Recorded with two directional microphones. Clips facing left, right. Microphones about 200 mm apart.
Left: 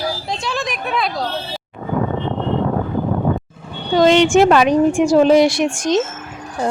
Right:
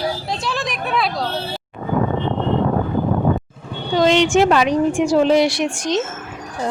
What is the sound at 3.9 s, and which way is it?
A woman's voice, 50° left (ahead or behind).